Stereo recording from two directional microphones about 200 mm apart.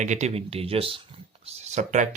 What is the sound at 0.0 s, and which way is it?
Speech, 35° right (ahead or behind).